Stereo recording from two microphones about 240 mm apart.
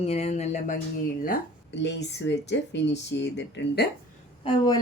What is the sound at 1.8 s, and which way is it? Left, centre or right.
Speech, left.